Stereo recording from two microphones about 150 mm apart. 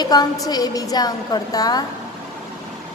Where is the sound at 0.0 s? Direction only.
25° left (ahead or behind).